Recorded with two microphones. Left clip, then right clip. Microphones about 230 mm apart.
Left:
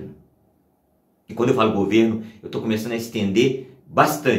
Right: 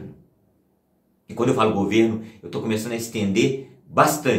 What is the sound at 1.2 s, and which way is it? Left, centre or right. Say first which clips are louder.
Speech: left 1 dB; centre.